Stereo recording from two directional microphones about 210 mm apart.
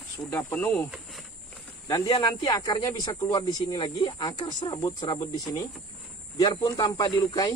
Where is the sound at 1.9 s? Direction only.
20° left (ahead or behind).